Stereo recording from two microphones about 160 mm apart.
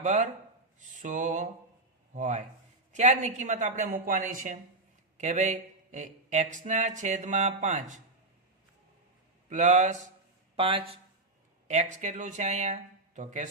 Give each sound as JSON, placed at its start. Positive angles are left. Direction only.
{"t": 0.0, "sound": "speech", "side_deg": -50}
{"t": 9.5, "sound": "speech", "side_deg": -50}
{"t": 10.6, "sound": "speech", "side_deg": -35}
{"t": 11.7, "sound": "speech", "side_deg": -45}